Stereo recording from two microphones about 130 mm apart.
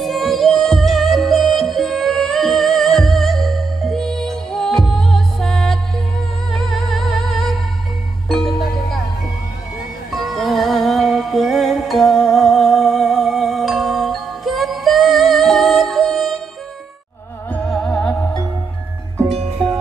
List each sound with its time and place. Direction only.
0.0 s music: centre (ahead or behind)
10.1 s music: centre (ahead or behind)
17.5 s music: 10° left (ahead or behind)